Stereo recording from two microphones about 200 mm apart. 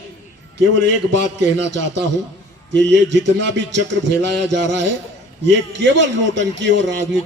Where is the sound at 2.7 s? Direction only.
60° right (ahead or behind).